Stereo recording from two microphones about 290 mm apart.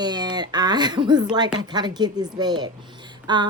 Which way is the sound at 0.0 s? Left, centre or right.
Centre.